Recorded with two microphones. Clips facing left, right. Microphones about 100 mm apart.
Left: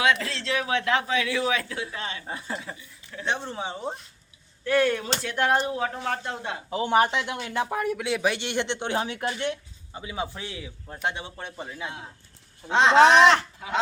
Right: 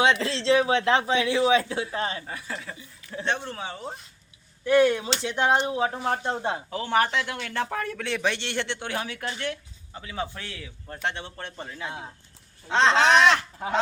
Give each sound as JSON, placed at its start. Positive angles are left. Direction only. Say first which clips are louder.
{"t": 0.0, "sound": "a man's voice", "louder": "right 2 dB", "side_deg": -30}
{"t": 2.2, "sound": "speech", "louder": "left 2 dB", "side_deg": 20}
{"t": 4.6, "sound": "a man's voice", "louder": "right 3 dB", "side_deg": -15}
{"t": 6.2, "sound": "speech", "louder": "right 5 dB", "side_deg": -30}
{"t": 6.7, "sound": "speech", "louder": "left 4 dB", "side_deg": 20}
{"t": 13.6, "sound": "fowl", "louder": "right 4 dB", "side_deg": -45}